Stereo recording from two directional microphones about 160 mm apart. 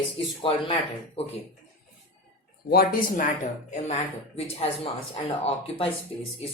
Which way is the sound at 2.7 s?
70° left (ahead or behind).